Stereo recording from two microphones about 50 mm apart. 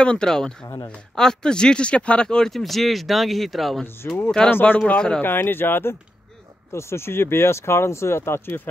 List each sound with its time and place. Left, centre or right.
0.0 s speech: left
2.5 s speech: centre
4.0 s speech: left
4.7 s speech: left
5.2 s speech: left
6.7 s speech: left